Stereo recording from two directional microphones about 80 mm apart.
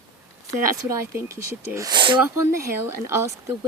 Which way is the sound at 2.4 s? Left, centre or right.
Right.